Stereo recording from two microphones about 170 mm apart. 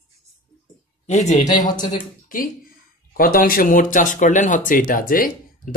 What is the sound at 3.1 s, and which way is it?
Speech, 60° left (ahead or behind).